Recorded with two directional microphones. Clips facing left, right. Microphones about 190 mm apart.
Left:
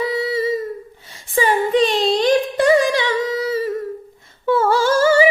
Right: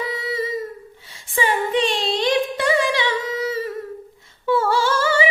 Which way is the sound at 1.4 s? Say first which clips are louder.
Left 4 dB; 40° left (ahead or behind).